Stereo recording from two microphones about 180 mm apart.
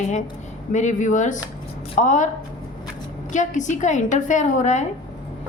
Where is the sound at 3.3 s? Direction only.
45° left (ahead or behind).